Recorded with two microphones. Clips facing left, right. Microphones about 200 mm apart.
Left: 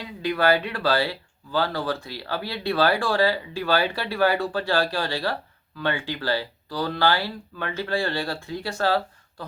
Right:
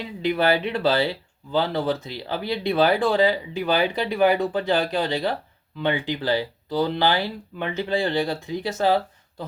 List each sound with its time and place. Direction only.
0.0 s speech: 20° right (ahead or behind)